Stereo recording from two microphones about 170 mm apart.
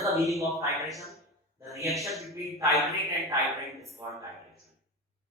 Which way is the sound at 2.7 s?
Centre (ahead or behind).